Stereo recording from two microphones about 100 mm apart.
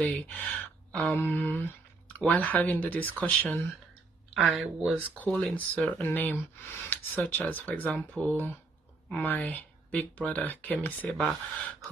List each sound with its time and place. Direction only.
0.0 s speech: 15° left (ahead or behind)
4.4 s speech: 5° right (ahead or behind)
5.0 s speech: 15° left (ahead or behind)
5.9 s speech: 20° left (ahead or behind)
11.1 s speech: 5° left (ahead or behind)